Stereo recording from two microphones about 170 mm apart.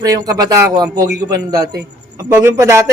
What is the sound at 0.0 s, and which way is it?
A man's voice, 20° right (ahead or behind).